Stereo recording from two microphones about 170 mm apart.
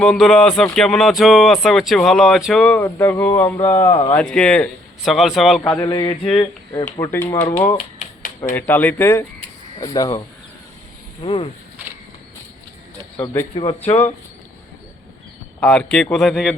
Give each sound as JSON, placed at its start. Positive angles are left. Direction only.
{"t": 0.0, "sound": "speech", "side_deg": 5}
{"t": 5.7, "sound": "speech", "side_deg": 25}
{"t": 6.1, "sound": "speech", "side_deg": 35}
{"t": 7.0, "sound": "speech", "side_deg": 15}
{"t": 8.5, "sound": "speech", "side_deg": 10}
{"t": 13.6, "sound": "speech", "side_deg": 35}
{"t": 15.6, "sound": "speech", "side_deg": 5}